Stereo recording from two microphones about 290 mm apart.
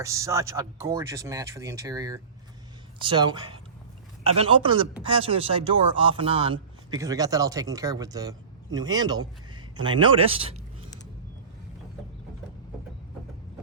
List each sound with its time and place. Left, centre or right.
0.0 s speech: centre